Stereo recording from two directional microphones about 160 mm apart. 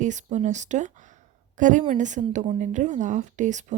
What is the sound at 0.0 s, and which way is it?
A woman's voice, 50° right (ahead or behind).